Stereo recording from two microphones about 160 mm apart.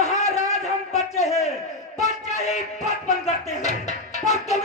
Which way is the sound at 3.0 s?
45° left (ahead or behind).